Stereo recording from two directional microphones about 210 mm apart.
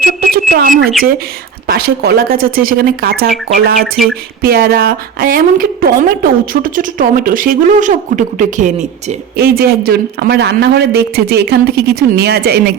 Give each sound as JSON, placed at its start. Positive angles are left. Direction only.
{"t": 0.0, "sound": "bird", "side_deg": -45}
{"t": 1.6, "sound": "a woman's voice", "side_deg": -45}